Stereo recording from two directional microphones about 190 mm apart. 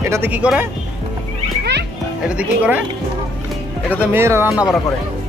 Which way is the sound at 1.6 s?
60° right (ahead or behind).